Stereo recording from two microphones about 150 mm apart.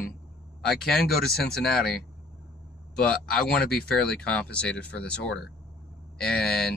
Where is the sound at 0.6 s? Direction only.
Centre (ahead or behind).